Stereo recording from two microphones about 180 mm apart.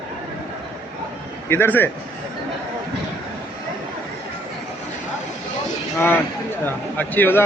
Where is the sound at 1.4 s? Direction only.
10° left (ahead or behind).